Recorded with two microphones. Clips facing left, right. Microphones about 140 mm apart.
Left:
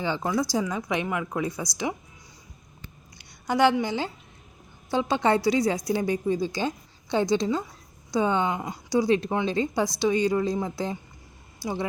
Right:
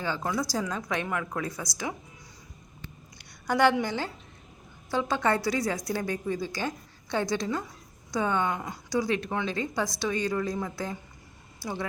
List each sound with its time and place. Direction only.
0.0 s a woman's voice: 20° left (ahead or behind)
3.4 s a woman's voice: 10° left (ahead or behind)